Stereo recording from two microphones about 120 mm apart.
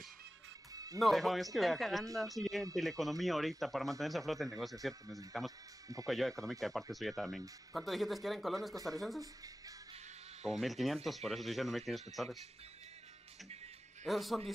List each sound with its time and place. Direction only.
0.9 s speech: centre (ahead or behind)
8.7 s speech: 30° right (ahead or behind)
10.5 s speech: centre (ahead or behind)
14.0 s speech: centre (ahead or behind)